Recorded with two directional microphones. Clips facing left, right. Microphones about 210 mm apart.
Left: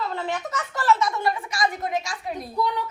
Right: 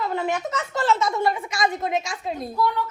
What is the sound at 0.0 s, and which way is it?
A woman's voice, 15° right (ahead or behind).